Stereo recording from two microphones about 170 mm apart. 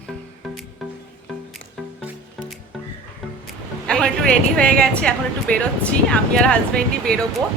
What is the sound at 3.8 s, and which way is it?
Speech, 5° left (ahead or behind).